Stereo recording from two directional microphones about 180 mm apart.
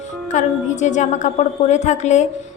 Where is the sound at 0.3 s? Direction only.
45° left (ahead or behind).